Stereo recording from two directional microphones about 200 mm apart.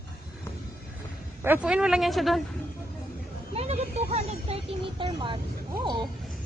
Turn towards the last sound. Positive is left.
turn(degrees=-20)  # may be behind; listen again after turning